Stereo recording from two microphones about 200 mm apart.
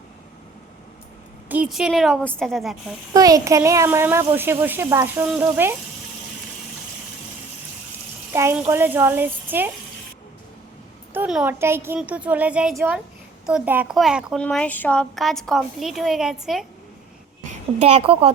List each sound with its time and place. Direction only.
1.5 s a woman's voice: 5° right (ahead or behind)
3.1 s speech: 15° right (ahead or behind)
8.3 s speech: 15° right (ahead or behind)
11.1 s a child's voice: 5° right (ahead or behind)
14.4 s a woman's voice: 5° left (ahead or behind)
17.4 s a woman's voice: 35° right (ahead or behind)